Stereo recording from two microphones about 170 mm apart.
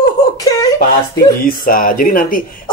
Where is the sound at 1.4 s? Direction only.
55° left (ahead or behind).